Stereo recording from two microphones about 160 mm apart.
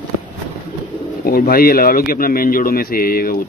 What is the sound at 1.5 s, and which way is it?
Speech, 70° left (ahead or behind).